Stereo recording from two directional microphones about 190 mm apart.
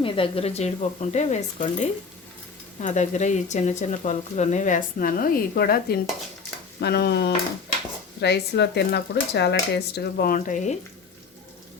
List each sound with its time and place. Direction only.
0.0 s speech: 30° left (ahead or behind)